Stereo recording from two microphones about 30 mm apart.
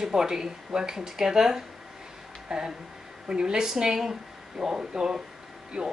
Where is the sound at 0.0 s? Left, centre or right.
Centre.